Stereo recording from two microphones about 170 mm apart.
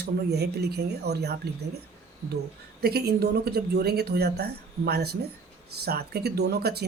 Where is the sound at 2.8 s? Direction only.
70° right (ahead or behind).